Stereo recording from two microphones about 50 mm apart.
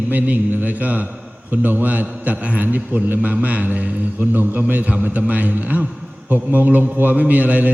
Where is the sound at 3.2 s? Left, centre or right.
Right.